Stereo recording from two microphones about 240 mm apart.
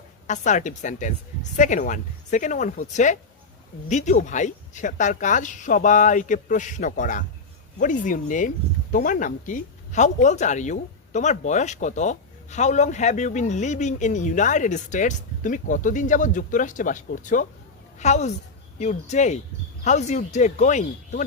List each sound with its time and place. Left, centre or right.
0.3 s speech: left